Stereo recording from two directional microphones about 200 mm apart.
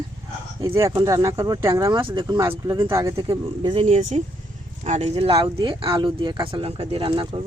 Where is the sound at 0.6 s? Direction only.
15° right (ahead or behind).